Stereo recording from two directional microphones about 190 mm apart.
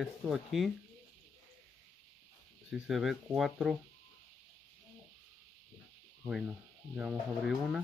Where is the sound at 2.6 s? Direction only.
Centre (ahead or behind).